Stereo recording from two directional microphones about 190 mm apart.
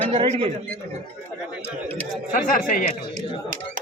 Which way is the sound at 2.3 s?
45° left (ahead or behind).